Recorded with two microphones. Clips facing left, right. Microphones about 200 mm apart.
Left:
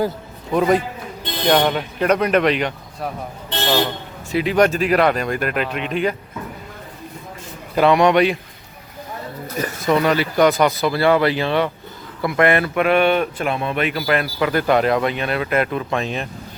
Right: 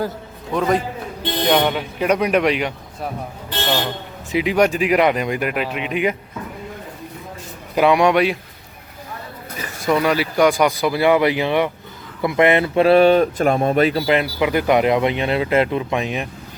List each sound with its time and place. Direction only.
0.5 s a man's voice: 10° left (ahead or behind)
1.5 s speech: 5° right (ahead or behind)
4.3 s speech: 15° right (ahead or behind)
7.8 s speech: 10° right (ahead or behind)
9.8 s speech: 5° right (ahead or behind)